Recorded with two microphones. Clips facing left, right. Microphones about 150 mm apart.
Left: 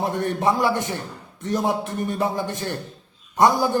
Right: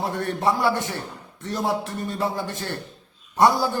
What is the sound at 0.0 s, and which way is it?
A man's voice, 15° left (ahead or behind).